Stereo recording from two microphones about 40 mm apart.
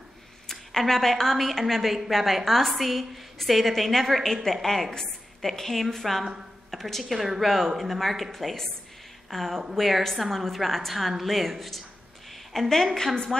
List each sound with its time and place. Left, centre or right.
0.5 s a woman's voice: centre